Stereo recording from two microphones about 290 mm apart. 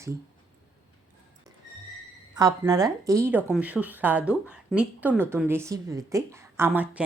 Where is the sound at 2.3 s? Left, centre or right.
Centre.